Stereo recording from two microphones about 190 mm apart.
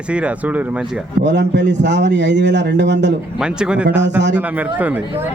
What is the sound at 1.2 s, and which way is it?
A man's voice, 65° right (ahead or behind).